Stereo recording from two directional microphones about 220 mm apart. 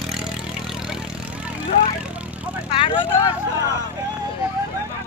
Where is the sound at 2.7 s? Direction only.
25° left (ahead or behind).